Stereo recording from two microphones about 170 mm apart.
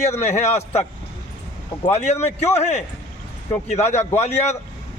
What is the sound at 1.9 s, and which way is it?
Speech, 40° left (ahead or behind).